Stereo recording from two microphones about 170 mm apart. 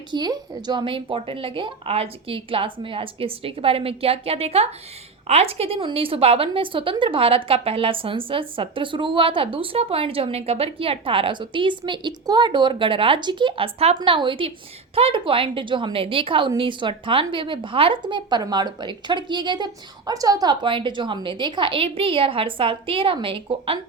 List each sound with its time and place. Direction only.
0.1 s a woman's voice: 25° right (ahead or behind)